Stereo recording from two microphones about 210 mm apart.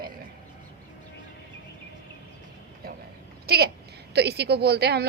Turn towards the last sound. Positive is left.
turn(degrees=-50)  # may be behind; listen again after turning